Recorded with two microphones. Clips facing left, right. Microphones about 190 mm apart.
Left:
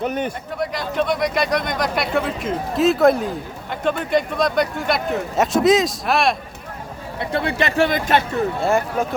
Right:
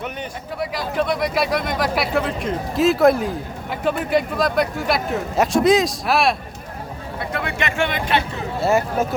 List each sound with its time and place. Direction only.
0.0 s speech: 40° left (ahead or behind)
0.6 s speech: 5° right (ahead or behind)
7.2 s speech: 30° left (ahead or behind)
8.6 s speech: centre (ahead or behind)